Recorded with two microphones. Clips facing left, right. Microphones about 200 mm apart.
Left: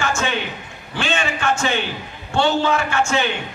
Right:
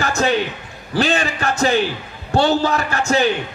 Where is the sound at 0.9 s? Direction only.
40° right (ahead or behind).